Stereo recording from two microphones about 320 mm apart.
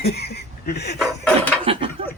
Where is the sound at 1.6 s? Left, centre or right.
Centre.